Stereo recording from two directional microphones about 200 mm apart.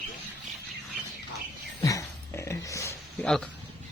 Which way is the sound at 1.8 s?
15° left (ahead or behind).